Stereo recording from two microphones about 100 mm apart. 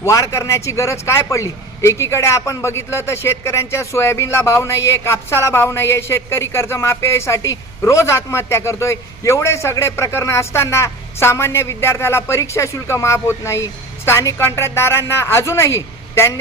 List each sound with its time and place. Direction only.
0.0 s a man's voice: 30° left (ahead or behind)